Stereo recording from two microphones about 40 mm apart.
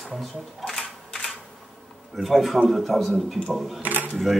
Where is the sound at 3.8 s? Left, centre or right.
Right.